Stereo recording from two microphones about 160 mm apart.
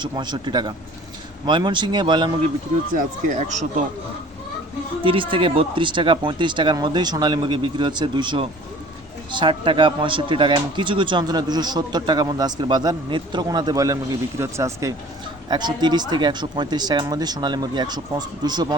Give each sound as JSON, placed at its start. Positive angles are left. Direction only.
{"t": 0.0, "sound": "speech", "side_deg": -25}
{"t": 2.9, "sound": "speech", "side_deg": -50}
{"t": 5.0, "sound": "speech", "side_deg": -30}